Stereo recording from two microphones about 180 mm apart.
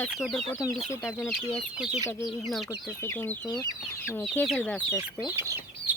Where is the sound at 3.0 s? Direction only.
10° left (ahead or behind).